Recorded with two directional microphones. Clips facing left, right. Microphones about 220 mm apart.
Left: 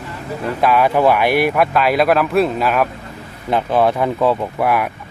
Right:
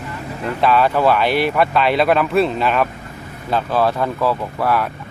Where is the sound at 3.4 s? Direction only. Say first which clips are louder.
Left 2 dB; 20° left (ahead or behind).